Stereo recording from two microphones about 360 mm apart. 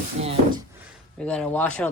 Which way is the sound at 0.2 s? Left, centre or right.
Centre.